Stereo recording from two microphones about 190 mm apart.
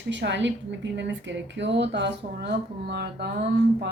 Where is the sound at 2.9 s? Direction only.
60° right (ahead or behind).